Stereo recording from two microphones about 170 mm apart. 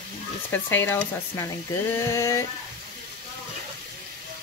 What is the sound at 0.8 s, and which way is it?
Speech, 20° left (ahead or behind).